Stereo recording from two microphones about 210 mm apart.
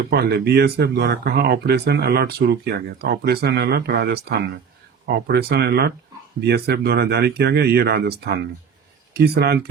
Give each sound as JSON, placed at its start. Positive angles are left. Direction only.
{"t": 0.1, "sound": "speech", "side_deg": -45}
{"t": 9.1, "sound": "speech", "side_deg": -50}